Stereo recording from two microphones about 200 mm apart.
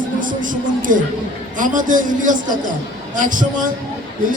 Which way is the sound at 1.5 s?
40° right (ahead or behind).